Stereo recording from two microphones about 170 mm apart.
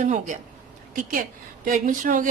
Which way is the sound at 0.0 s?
45° right (ahead or behind).